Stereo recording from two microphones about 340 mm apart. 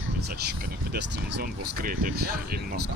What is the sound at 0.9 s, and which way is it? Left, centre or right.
Speech, right.